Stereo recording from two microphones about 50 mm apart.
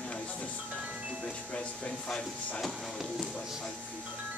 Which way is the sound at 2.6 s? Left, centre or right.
Centre.